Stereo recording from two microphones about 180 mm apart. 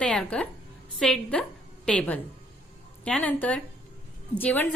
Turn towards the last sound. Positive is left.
turn(degrees=10)  # may be behind; listen again after turning